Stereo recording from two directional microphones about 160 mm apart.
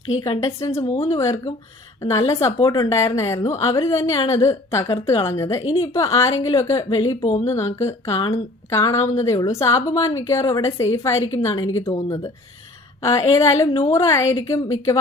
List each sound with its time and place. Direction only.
0.2 s a woman's voice: 30° left (ahead or behind)
1.2 s speech: 20° left (ahead or behind)
2.6 s speech: 30° left (ahead or behind)
4.4 s speech: 20° left (ahead or behind)
6.9 s a woman's voice: 30° left (ahead or behind)
7.5 s speech: 20° left (ahead or behind)